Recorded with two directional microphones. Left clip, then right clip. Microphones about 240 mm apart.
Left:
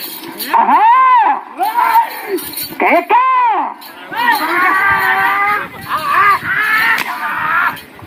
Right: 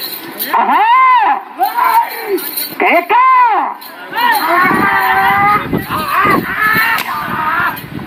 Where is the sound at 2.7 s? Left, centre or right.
Centre.